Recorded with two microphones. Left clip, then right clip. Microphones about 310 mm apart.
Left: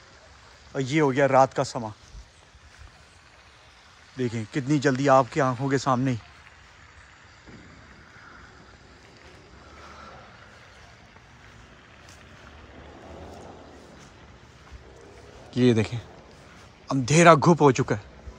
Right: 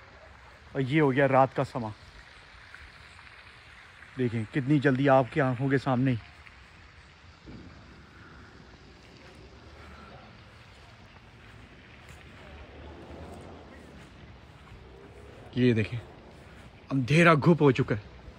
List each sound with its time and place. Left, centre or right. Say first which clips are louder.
0.7 s speech: left 2 dB; centre
4.2 s speech: left 2 dB; centre
15.5 s speech: left 4 dB; centre